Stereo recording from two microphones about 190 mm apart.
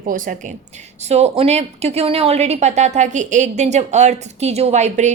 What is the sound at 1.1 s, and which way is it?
A woman's voice, 35° right (ahead or behind).